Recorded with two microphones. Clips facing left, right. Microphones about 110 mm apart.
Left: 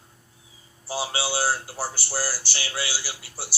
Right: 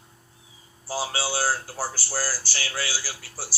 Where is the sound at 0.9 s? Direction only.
25° left (ahead or behind).